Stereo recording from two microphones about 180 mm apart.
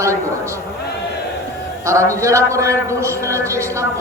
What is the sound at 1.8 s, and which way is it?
A man's voice, 15° right (ahead or behind).